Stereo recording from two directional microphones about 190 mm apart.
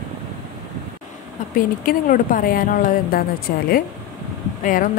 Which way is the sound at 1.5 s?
45° left (ahead or behind).